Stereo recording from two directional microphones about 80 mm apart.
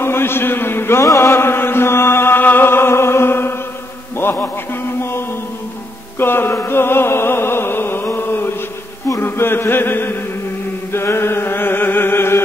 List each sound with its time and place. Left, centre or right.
0.0 s a man's voice: left
1.0 s chant: left
4.2 s a sound: left
6.1 s music: left
9.1 s chant: left